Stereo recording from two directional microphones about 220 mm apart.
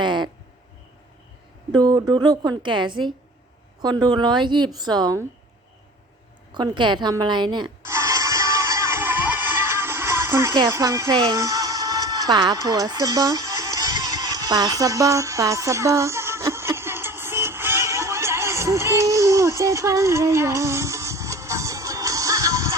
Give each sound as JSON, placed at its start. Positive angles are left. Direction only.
{"t": 0.0, "sound": "a sound", "side_deg": -20}
{"t": 1.7, "sound": "a woman's voice", "side_deg": -20}
{"t": 6.5, "sound": "a woman's voice", "side_deg": -20}
{"t": 7.9, "sound": "music", "side_deg": -15}